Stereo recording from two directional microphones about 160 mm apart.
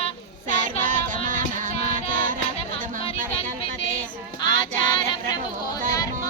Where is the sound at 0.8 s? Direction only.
55° right (ahead or behind).